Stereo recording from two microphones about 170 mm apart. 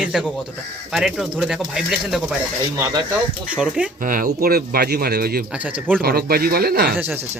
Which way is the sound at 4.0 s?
55° right (ahead or behind).